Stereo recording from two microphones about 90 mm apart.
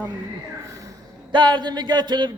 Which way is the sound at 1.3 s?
60° right (ahead or behind).